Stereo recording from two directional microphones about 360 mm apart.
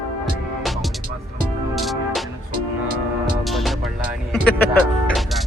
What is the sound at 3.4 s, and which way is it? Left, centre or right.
Music, centre.